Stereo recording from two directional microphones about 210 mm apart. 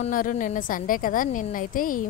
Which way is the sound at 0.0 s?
40° left (ahead or behind).